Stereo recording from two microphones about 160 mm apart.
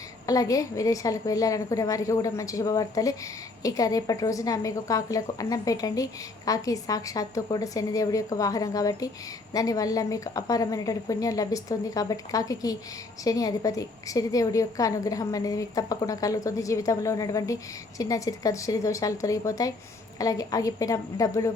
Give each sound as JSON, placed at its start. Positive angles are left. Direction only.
{"t": 0.3, "sound": "a woman's voice", "side_deg": 20}